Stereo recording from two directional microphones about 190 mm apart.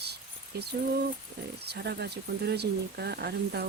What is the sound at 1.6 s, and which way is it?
Speech, 60° right (ahead or behind).